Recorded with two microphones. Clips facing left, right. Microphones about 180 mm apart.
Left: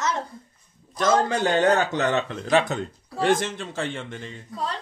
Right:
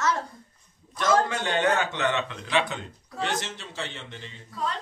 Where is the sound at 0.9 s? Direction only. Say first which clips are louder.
Left 3 dB; 40° left (ahead or behind).